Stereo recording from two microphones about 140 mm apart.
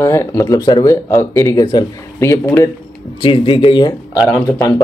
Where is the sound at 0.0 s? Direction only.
20° left (ahead or behind).